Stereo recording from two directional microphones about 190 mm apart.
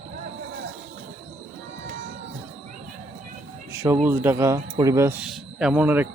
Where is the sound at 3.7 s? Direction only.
15° right (ahead or behind).